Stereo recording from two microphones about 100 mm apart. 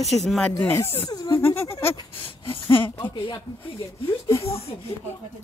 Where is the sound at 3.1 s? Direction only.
60° left (ahead or behind).